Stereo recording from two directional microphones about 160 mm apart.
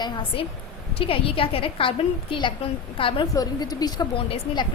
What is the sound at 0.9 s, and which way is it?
A woman's voice, 35° left (ahead or behind).